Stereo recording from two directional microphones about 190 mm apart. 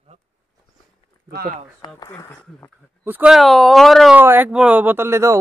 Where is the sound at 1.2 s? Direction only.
50° right (ahead or behind).